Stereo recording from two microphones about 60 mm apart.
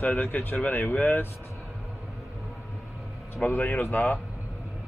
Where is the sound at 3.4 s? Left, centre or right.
Left.